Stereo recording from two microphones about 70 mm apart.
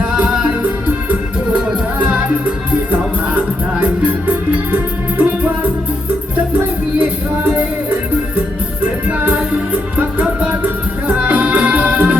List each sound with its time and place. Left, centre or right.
4.7 s music: right
9.0 s music: right